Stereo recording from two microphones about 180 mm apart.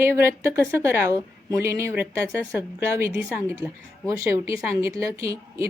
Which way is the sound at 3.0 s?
10° right (ahead or behind).